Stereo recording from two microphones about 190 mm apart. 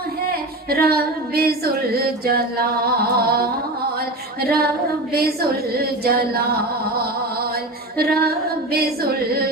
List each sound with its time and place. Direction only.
0.3 s female singing: 55° right (ahead or behind)
3.2 s a woman's voice: 50° right (ahead or behind)
7.5 s a sound: 55° right (ahead or behind)
8.7 s a woman's voice: 55° right (ahead or behind)